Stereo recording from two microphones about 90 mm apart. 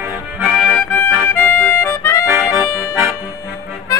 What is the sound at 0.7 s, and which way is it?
Accordion, 20° left (ahead or behind).